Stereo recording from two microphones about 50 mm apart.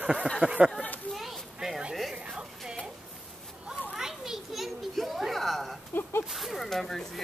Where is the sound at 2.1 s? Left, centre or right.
Right.